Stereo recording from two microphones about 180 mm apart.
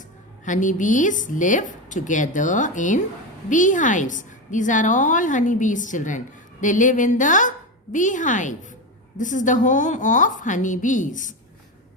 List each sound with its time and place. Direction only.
0.4 s a woman's voice: 45° left (ahead or behind)